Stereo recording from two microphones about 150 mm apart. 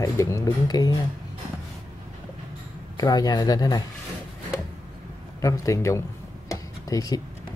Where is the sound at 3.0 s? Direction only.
25° left (ahead or behind).